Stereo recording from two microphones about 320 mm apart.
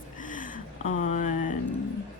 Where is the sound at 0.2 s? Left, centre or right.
Left.